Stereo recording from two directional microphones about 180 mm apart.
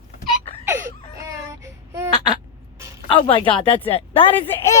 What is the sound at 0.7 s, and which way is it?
Baby cry, 15° right (ahead or behind).